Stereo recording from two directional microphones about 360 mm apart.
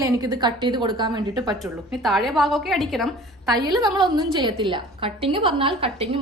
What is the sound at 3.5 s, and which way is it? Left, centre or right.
A woman's voice, centre.